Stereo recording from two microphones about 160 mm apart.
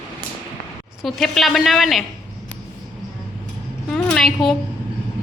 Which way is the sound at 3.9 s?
5° left (ahead or behind).